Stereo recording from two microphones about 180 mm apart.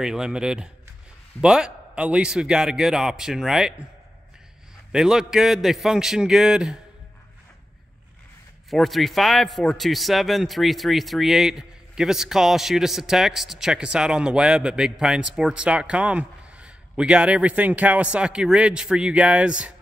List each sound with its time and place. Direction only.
0.0 s a man's voice: 5° right (ahead or behind)
4.9 s a man's voice: 5° right (ahead or behind)
8.6 s a man's voice: centre (ahead or behind)